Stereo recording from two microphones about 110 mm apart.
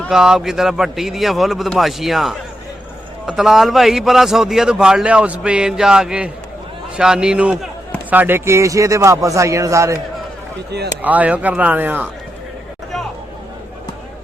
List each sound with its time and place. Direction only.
0.1 s a man's voice: 5° right (ahead or behind); by 10.0 s 30° right (ahead or behind)
11.0 s speech: 15° right (ahead or behind)